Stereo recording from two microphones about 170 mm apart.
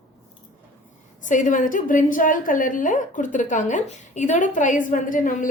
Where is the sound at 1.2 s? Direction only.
50° left (ahead or behind).